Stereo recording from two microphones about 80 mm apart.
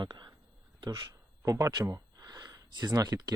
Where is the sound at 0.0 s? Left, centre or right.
Right.